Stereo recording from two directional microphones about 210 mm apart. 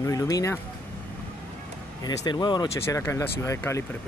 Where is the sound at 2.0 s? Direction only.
20° left (ahead or behind).